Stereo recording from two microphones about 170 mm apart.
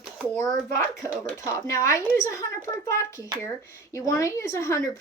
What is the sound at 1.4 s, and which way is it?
A woman's voice, 20° left (ahead or behind).